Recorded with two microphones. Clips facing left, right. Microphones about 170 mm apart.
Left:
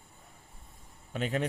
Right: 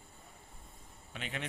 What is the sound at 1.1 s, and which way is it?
Speech, 40° left (ahead or behind).